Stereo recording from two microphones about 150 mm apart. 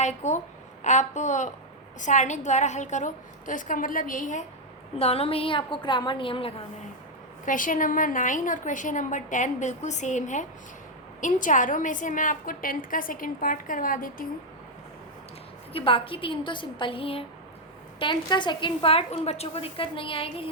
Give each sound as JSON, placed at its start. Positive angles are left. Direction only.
{"t": 0.0, "sound": "a woman's voice", "side_deg": 50}
{"t": 4.9, "sound": "a woman's voice", "side_deg": 40}
{"t": 7.4, "sound": "a woman's voice", "side_deg": 60}
{"t": 15.7, "sound": "a woman's voice", "side_deg": 35}